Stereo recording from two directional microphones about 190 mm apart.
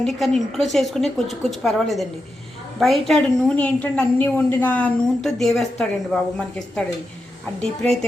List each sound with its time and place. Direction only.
0.0 s a woman's voice: centre (ahead or behind)
7.6 s a woman's voice: 5° left (ahead or behind)